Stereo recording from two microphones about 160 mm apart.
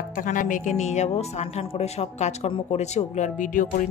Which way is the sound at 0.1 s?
55° left (ahead or behind).